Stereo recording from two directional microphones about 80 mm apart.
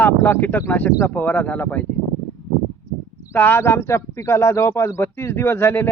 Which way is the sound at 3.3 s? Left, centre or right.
Left.